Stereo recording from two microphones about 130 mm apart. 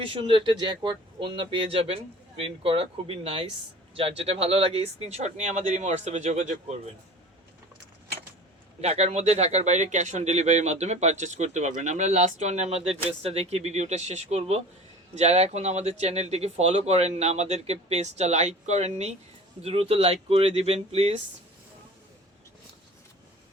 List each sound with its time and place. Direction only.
0.0 s speech: 40° right (ahead or behind); by 6.7 s 60° right (ahead or behind)
8.8 s speech: 55° right (ahead or behind)